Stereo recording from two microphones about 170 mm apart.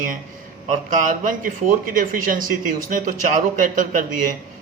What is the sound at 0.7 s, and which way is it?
Speech, 50° right (ahead or behind).